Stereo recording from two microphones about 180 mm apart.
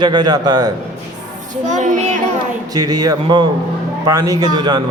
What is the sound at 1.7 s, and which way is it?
Speech, 45° right (ahead or behind).